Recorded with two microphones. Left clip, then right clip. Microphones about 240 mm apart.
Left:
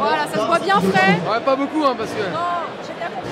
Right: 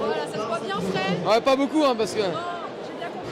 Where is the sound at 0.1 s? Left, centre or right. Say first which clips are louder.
Left 9 dB; left.